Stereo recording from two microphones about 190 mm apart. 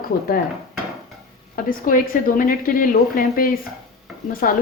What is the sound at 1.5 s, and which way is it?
A woman's voice, 45° left (ahead or behind).